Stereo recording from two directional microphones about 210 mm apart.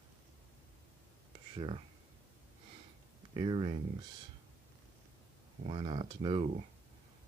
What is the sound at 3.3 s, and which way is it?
Speech, 25° right (ahead or behind).